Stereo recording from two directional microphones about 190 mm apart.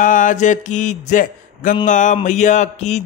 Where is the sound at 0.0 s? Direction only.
45° left (ahead or behind).